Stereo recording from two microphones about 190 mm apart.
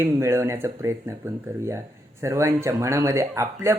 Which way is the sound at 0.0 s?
15° right (ahead or behind).